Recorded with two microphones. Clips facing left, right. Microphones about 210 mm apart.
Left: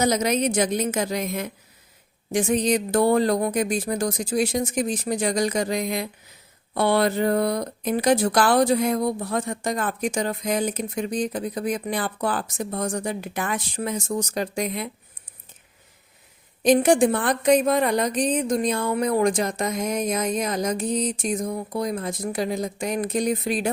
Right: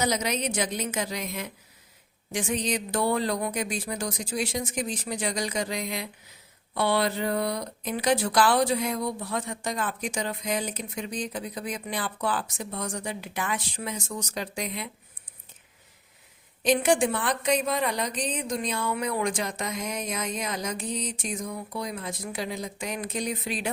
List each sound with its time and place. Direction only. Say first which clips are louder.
0.0 s speech: left 6 dB; 45° left (ahead or behind)
16.6 s speech: left 6 dB; 40° left (ahead or behind)